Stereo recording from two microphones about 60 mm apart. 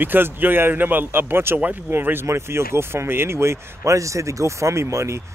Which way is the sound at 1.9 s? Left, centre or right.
Right.